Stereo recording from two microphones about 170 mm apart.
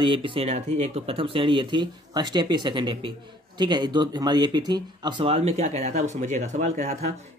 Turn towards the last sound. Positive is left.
turn(degrees=-40)  # may be behind; listen again after turning